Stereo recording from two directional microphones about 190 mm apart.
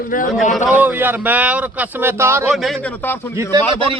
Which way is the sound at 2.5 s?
Centre (ahead or behind).